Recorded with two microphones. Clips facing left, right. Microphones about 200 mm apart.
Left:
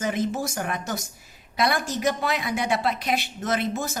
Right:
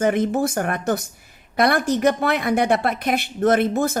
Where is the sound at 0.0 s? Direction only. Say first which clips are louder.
Right 7 dB; 55° right (ahead or behind).